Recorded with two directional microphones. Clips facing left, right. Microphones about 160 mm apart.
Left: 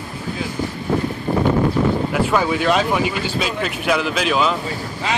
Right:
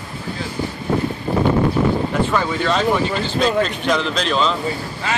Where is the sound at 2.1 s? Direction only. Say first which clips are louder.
Left 1 dB; 10° left (ahead or behind).